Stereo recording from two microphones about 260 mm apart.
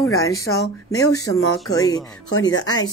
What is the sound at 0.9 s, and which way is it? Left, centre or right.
Speech, centre.